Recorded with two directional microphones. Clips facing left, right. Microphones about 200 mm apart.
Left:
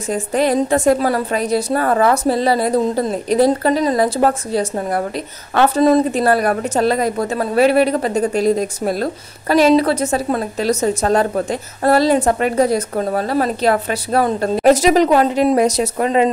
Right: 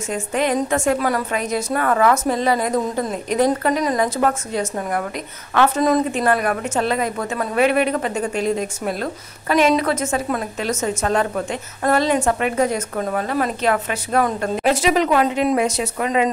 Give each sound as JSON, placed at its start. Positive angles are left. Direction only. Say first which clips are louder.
{"t": 0.1, "sound": "a woman's voice", "louder": "left 4 dB", "side_deg": 35}